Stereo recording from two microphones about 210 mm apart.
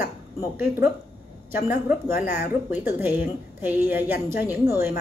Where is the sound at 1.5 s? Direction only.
45° left (ahead or behind).